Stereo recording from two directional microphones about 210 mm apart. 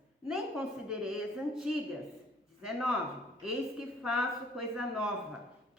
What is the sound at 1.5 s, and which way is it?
A woman's voice, 5° right (ahead or behind).